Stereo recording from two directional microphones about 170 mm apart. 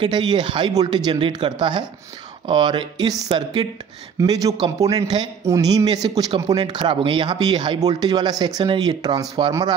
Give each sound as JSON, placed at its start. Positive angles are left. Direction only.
{"t": 0.0, "sound": "speech", "side_deg": -25}